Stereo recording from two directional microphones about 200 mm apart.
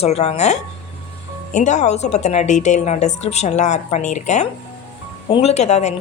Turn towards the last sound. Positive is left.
turn(degrees=35)  # may be behind; listen again after turning